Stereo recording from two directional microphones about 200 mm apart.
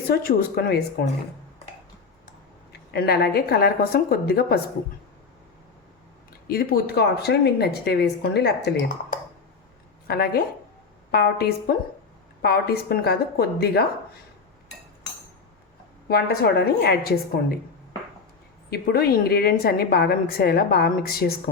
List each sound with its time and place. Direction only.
0.1 s a woman's voice: 45° left (ahead or behind)
2.9 s a woman's voice: 50° left (ahead or behind)
6.5 s a woman's voice: 50° left (ahead or behind)
10.1 s a woman's voice: 50° left (ahead or behind)
16.0 s a woman's voice: 50° left (ahead or behind)
18.7 s a woman's voice: 50° left (ahead or behind)